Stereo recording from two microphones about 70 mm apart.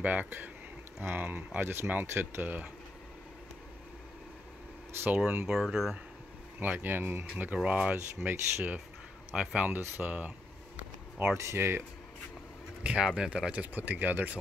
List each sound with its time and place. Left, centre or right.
0.0 s speech: right
5.0 s speech: right
5.5 s speech: centre
6.6 s speech: right
9.3 s speech: centre
11.3 s speech: right
12.8 s speech: centre